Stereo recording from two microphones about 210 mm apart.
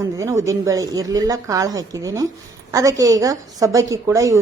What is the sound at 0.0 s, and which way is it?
Speech, 15° right (ahead or behind).